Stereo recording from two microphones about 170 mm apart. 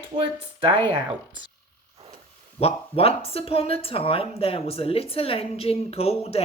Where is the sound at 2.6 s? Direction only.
35° left (ahead or behind).